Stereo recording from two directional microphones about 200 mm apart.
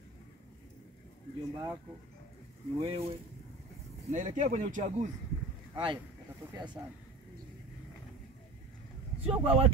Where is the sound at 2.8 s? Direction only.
30° right (ahead or behind).